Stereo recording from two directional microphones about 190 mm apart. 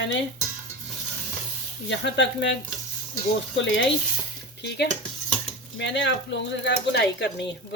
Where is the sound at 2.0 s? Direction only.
70° left (ahead or behind).